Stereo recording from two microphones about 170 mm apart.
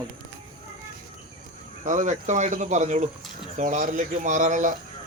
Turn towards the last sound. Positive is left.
turn(degrees=-45)  # may be behind; listen again after turning